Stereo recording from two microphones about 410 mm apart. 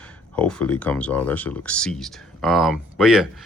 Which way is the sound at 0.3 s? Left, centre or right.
Centre.